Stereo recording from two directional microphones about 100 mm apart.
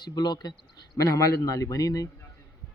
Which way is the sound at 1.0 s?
30° left (ahead or behind).